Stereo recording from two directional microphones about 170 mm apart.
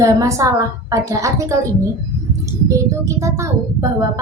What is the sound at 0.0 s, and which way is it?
A woman's voice, 20° right (ahead or behind).